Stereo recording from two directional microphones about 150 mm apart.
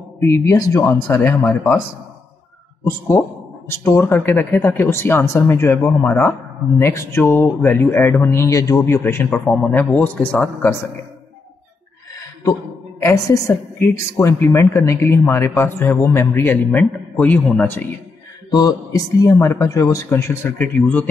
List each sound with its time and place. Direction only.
0.2 s speech: 20° left (ahead or behind)
3.6 s speech: 15° left (ahead or behind)
9.5 s speech: centre (ahead or behind)
13.0 s speech: 20° left (ahead or behind)
16.7 s a man's voice: 5° left (ahead or behind)
17.6 s speech: 15° left (ahead or behind)
18.5 s speech: 25° left (ahead or behind); by 21.0 s 10° left (ahead or behind)